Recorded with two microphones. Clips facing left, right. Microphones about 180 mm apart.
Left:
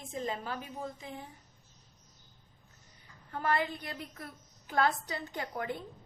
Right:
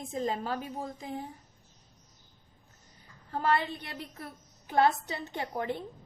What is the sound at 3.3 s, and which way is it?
A woman's voice, 30° right (ahead or behind).